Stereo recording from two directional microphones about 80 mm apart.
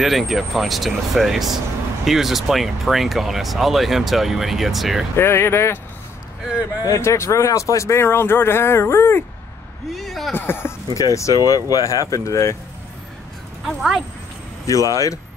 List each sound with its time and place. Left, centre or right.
0.0 s speech: centre
5.1 s speech: left
7.0 s speech: left
9.9 s a sound: centre
10.3 s speech: left
11.0 s speech: left
13.7 s speech: centre
14.7 s speech: left